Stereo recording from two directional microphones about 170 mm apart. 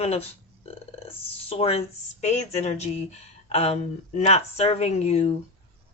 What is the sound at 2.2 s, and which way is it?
Speech, 40° left (ahead or behind).